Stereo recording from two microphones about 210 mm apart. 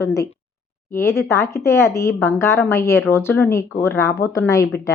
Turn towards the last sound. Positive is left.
turn(degrees=15)  # may be behind; listen again after turning